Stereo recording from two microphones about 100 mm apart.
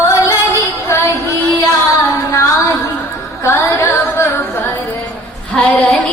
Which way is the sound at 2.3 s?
30° left (ahead or behind).